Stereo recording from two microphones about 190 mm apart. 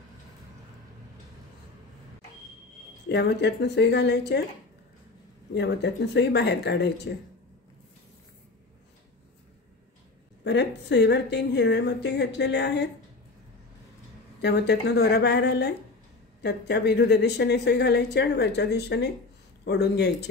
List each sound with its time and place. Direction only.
3.1 s a woman's voice: 60° left (ahead or behind)
5.5 s a woman's voice: 60° left (ahead or behind)
10.4 s a woman's voice: 65° left (ahead or behind)
14.4 s a woman's voice: 60° left (ahead or behind)